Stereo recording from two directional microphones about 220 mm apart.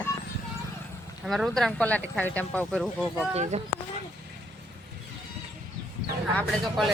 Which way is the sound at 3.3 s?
30° right (ahead or behind).